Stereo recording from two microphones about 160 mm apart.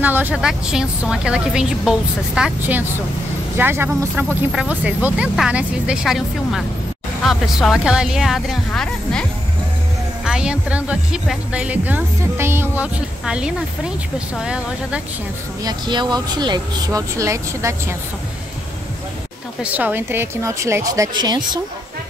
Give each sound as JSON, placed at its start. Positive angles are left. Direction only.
{"t": 0.0, "sound": "a woman's voice", "side_deg": -10}
{"t": 10.2, "sound": "speech", "side_deg": -5}
{"t": 15.6, "sound": "speech", "side_deg": -25}
{"t": 19.6, "sound": "speech", "side_deg": -10}